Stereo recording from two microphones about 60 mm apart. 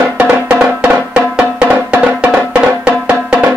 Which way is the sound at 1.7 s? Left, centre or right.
Right.